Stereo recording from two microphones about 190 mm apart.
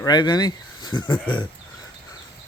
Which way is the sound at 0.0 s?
20° left (ahead or behind).